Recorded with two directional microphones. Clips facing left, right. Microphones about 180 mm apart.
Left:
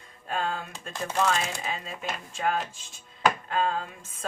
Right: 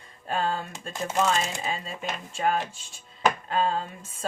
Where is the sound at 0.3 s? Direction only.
30° right (ahead or behind).